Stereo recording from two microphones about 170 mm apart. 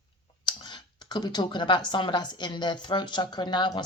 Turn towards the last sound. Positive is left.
turn(degrees=25)  # may be behind; listen again after turning